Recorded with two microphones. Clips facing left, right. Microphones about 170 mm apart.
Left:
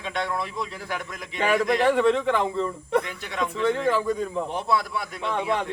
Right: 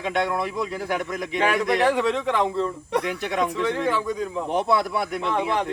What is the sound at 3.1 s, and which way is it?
Speech, 70° right (ahead or behind).